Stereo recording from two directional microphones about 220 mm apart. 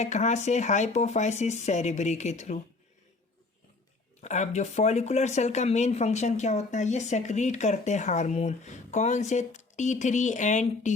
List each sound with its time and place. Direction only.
0.0 s speech: 30° left (ahead or behind)
4.2 s speech: 30° left (ahead or behind)